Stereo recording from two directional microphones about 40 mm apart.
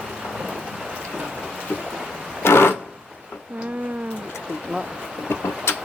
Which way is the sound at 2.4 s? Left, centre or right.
Left.